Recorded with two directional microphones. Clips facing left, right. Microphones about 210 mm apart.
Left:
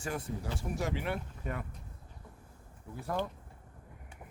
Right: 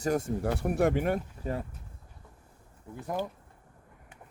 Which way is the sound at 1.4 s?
30° right (ahead or behind).